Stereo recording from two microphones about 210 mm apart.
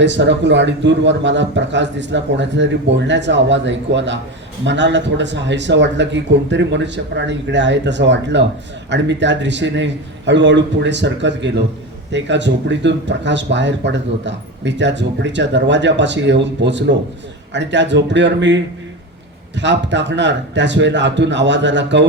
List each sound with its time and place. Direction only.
0.0 s speech: 55° right (ahead or behind)